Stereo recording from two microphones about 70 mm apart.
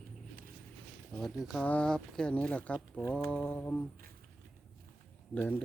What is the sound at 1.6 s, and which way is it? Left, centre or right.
Speech, centre.